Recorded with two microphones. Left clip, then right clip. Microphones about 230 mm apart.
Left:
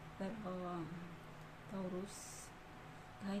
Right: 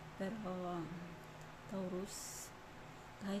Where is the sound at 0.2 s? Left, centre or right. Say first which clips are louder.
Right 2 dB; right.